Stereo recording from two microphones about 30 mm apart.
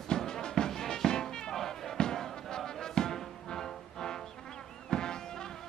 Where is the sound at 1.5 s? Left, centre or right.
Centre.